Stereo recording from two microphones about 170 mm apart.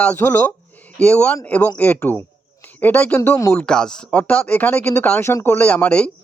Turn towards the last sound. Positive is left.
turn(degrees=5)  # may be behind; listen again after turning